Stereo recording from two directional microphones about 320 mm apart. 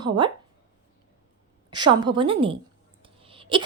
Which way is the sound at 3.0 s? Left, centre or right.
Centre.